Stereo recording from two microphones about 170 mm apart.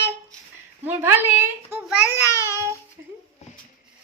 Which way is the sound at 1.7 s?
10° right (ahead or behind).